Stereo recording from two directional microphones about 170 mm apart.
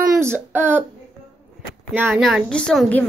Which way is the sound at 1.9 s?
10° right (ahead or behind).